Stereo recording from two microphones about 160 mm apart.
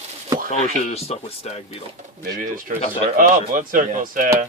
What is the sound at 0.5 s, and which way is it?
Speech, 40° left (ahead or behind).